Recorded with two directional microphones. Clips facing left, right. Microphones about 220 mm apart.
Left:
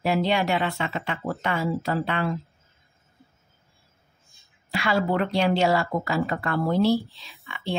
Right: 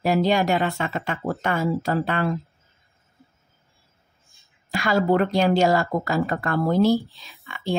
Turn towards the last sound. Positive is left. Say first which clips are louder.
# right 2 dB
turn(degrees=-45)  # may be behind; listen again after turning